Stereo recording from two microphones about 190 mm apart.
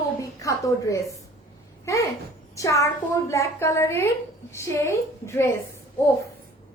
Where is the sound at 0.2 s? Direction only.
15° left (ahead or behind).